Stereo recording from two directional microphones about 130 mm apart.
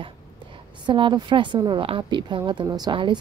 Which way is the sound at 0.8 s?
40° right (ahead or behind).